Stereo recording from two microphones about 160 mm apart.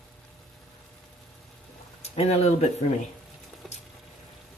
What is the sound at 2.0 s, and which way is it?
Speech, 40° left (ahead or behind).